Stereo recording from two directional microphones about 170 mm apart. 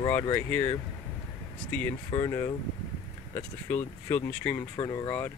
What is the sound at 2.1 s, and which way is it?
Speech, 35° left (ahead or behind).